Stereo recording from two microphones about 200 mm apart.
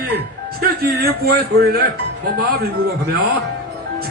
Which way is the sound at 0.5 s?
50° right (ahead or behind).